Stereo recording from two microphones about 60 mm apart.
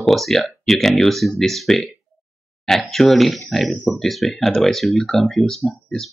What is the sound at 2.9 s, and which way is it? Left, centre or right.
Speech, centre.